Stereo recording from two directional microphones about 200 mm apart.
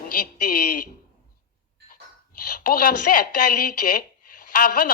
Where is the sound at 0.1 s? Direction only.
45° left (ahead or behind).